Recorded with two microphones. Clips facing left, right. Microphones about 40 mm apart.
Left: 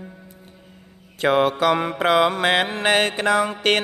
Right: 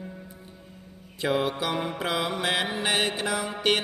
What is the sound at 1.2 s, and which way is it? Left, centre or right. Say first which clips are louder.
Music: left 8 dB; left.